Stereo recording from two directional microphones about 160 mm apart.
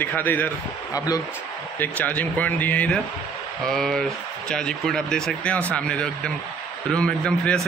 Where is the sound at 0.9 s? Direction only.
20° left (ahead or behind).